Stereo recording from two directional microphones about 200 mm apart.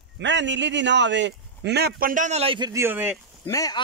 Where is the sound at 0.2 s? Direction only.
65° right (ahead or behind); by 2.7 s 25° right (ahead or behind).